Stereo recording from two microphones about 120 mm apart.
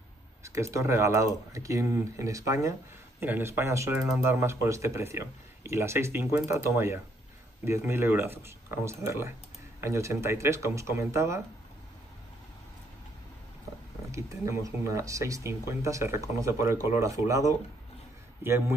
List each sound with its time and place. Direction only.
0.4 s speech: 25° right (ahead or behind)
3.2 s speech: 15° right (ahead or behind)
14.1 s speech: 25° right (ahead or behind)